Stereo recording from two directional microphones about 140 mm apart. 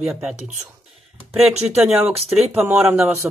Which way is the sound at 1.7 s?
10° right (ahead or behind).